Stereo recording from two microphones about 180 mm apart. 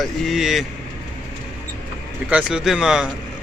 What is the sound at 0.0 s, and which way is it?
Speech, centre (ahead or behind).